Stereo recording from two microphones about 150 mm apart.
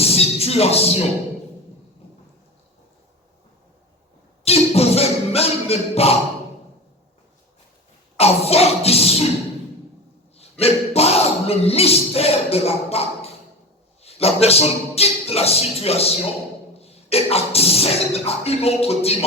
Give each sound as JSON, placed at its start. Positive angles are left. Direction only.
{"t": 0.0, "sound": "music", "side_deg": 40}
{"t": 4.4, "sound": "music", "side_deg": 40}
{"t": 8.2, "sound": "beatboxing", "side_deg": 40}
{"t": 10.3, "sound": "speech", "side_deg": 40}
{"t": 14.0, "sound": "beatboxing", "side_deg": 40}